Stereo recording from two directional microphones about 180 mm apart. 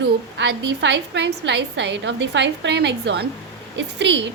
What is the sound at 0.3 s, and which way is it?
A woman's voice, 80° right.